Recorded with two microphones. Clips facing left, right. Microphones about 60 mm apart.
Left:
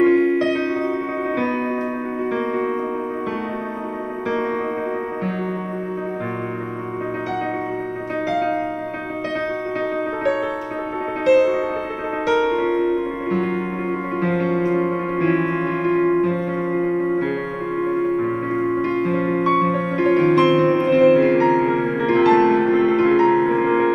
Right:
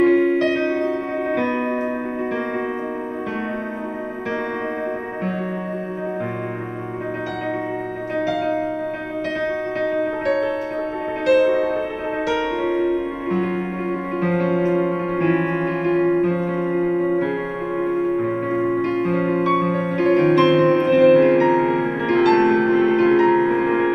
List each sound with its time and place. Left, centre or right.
0.0 s music: centre
8.3 s music: left
9.9 s music: centre
12.3 s music: centre
14.2 s music: centre
14.7 s music: left
16.7 s music: centre
17.8 s music: centre
23.2 s music: centre